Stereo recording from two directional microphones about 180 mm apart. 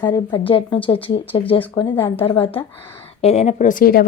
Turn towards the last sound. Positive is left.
turn(degrees=50)  # may be behind; listen again after turning